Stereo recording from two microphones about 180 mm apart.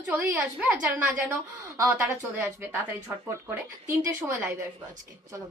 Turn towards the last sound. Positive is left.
turn(degrees=-15)  # may be behind; listen again after turning